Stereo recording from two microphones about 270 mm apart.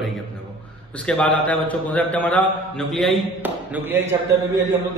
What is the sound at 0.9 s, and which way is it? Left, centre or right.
A man's voice, centre.